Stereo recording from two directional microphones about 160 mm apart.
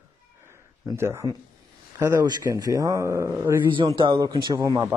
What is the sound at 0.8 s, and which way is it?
Speech, 15° right (ahead or behind).